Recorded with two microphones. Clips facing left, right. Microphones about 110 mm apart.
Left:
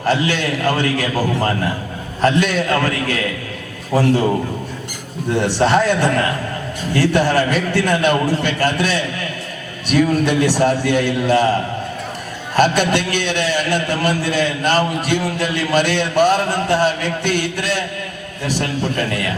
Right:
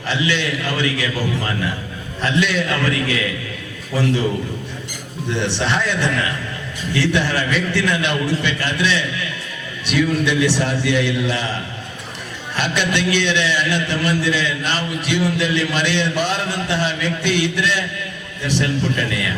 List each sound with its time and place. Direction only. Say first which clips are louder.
0.0 s a man's voice: left 3 dB; 45° left (ahead or behind)
5.3 s a man's voice: left 6 dB; 45° left (ahead or behind)